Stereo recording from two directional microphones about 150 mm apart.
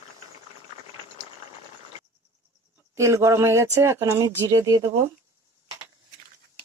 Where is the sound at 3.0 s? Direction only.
20° right (ahead or behind).